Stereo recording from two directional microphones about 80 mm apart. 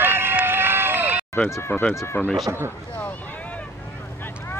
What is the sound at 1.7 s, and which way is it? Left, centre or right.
Speech, left.